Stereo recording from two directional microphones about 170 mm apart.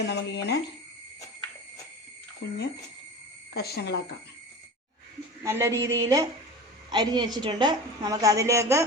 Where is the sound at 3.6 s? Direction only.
70° left (ahead or behind).